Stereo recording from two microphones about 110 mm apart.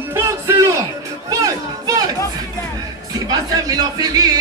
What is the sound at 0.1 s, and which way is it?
Music, 25° right (ahead or behind).